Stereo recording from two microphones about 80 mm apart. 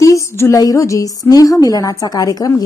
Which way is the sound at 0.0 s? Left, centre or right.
Left.